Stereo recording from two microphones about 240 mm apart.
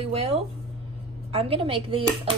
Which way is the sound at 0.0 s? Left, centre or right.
Right.